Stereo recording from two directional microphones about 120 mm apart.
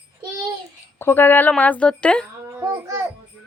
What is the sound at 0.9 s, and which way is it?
A woman's voice, 20° left (ahead or behind).